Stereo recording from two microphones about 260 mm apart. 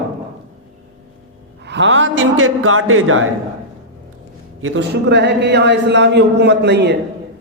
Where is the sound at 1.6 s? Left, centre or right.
Right.